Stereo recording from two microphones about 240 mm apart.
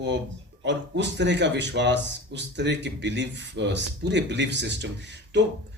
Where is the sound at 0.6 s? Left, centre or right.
Right.